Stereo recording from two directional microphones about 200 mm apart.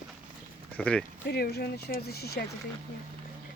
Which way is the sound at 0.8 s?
5° left (ahead or behind).